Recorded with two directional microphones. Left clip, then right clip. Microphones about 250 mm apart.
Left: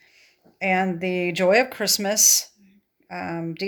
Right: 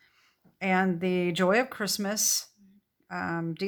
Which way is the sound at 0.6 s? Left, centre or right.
Right.